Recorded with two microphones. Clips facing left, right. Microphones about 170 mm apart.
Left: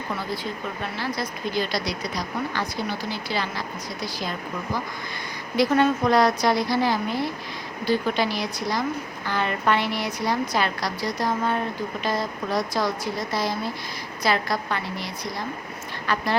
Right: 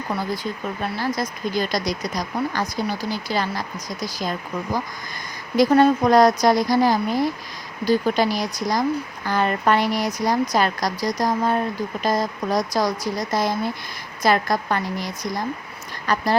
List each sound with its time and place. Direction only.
0.9 s speech: 45° right (ahead or behind)
5.5 s speech: 40° right (ahead or behind)